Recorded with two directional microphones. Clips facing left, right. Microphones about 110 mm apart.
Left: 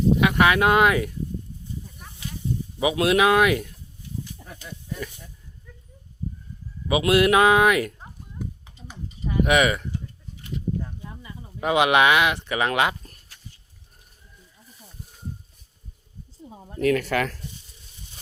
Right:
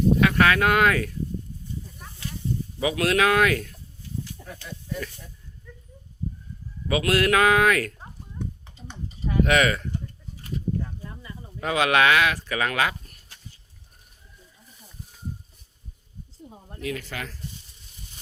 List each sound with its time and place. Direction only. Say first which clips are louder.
0.2 s speech: left 1 dB; 15° left (ahead or behind)
2.7 s speech: left 3 dB; 20° left (ahead or behind)
4.2 s a sound: right 2 dB; 15° left (ahead or behind)
6.8 s speech: left 3 dB; 15° left (ahead or behind)
7.9 s clip-clop: even; 5° left (ahead or behind)
9.4 s speech: left 1 dB; 15° left (ahead or behind)
11.2 s speech: left 4 dB; 15° left (ahead or behind)
16.7 s speech: left 11 dB; 65° left (ahead or behind)